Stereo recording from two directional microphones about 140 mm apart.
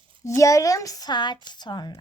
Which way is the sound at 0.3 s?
20° left (ahead or behind).